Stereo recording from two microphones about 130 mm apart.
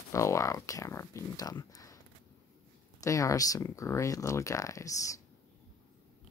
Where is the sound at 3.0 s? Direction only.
25° left (ahead or behind).